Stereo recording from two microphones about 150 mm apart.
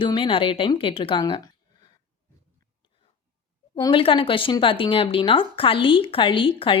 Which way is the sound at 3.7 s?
30° left (ahead or behind).